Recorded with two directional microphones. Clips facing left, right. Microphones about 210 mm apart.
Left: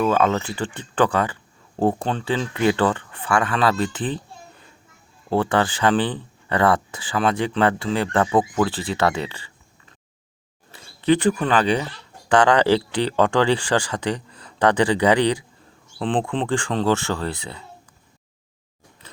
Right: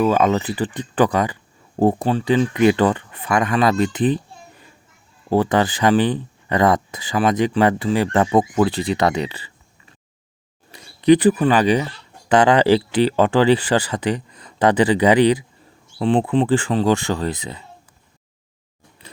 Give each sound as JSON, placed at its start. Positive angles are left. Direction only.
{"t": 0.0, "sound": "speech", "side_deg": -15}
{"t": 10.7, "sound": "speech", "side_deg": -15}